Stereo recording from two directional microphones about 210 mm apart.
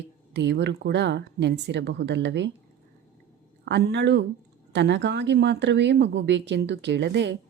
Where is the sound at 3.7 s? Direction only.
55° right (ahead or behind).